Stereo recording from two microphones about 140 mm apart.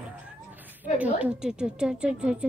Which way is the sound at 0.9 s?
10° right (ahead or behind).